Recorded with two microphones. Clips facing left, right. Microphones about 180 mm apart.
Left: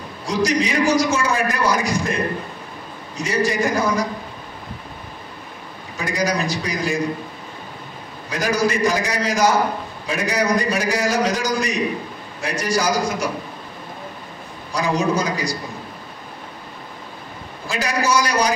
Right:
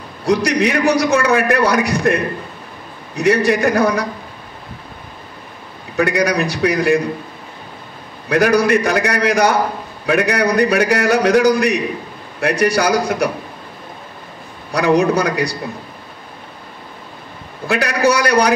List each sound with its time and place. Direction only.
0.2 s a man's voice: 65° right (ahead or behind)
5.9 s a man's voice: 65° right (ahead or behind)
8.3 s a man's voice: 65° right (ahead or behind)
14.7 s a man's voice: 65° right (ahead or behind)
17.6 s a man's voice: 65° right (ahead or behind)